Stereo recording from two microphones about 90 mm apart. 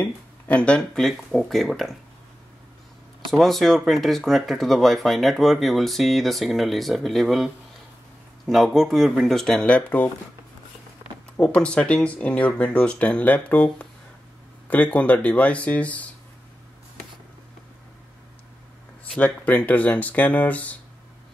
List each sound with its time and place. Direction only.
0.0 s speech: 15° left (ahead or behind)
3.3 s speech: 5° left (ahead or behind)
11.3 s speech: 10° left (ahead or behind)
19.1 s speech: 15° left (ahead or behind)